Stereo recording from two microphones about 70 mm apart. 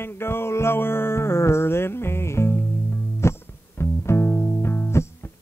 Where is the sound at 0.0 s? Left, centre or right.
Left.